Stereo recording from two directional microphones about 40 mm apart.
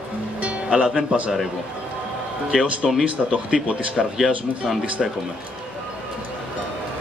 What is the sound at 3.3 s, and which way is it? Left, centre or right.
Speech, right.